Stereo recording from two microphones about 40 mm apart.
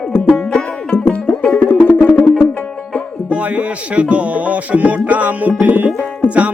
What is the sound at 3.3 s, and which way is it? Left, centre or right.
Music, right.